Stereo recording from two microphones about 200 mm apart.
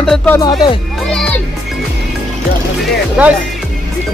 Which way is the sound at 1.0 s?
5° left (ahead or behind).